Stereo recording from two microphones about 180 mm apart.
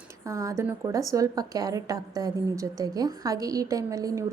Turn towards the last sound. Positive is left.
turn(degrees=-20)  # may be behind; listen again after turning